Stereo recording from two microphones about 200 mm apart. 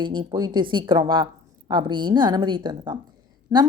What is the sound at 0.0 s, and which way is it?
A woman's voice, 25° right (ahead or behind).